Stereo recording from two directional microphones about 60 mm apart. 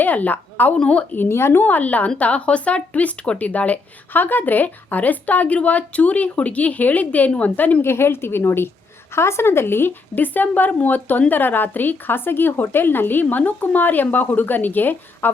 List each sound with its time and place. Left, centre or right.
0.0 s a woman's voice: left
0.8 s speech: centre
1.1 s speech: left
1.6 s speech: left
7.9 s speech: left